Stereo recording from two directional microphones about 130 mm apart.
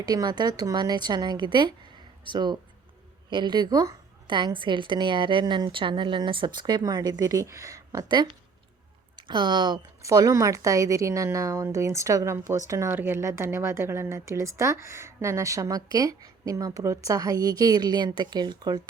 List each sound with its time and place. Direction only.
0.0 s a woman's voice: 30° right (ahead or behind)
10.0 s a woman's voice: 25° right (ahead or behind)